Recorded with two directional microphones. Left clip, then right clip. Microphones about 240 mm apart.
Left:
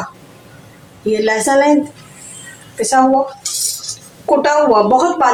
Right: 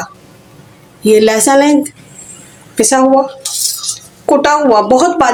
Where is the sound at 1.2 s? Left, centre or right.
Right.